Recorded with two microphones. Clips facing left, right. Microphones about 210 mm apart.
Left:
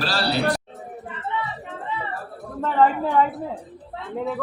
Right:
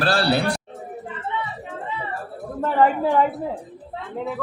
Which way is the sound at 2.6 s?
10° right (ahead or behind).